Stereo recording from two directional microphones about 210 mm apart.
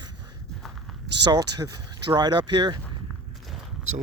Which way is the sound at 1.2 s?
20° right (ahead or behind).